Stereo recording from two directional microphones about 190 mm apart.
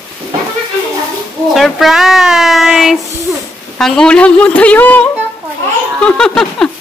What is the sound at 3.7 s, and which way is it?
A woman's voice, 5° left (ahead or behind).